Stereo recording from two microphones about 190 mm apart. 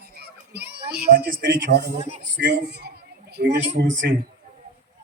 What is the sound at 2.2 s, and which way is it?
A man's voice, 65° right (ahead or behind).